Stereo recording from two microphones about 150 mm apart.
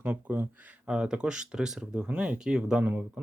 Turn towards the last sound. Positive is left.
turn(degrees=-10)  # may be behind; listen again after turning